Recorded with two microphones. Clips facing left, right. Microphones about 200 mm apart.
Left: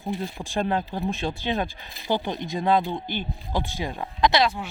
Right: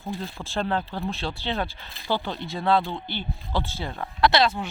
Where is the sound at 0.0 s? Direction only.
15° left (ahead or behind).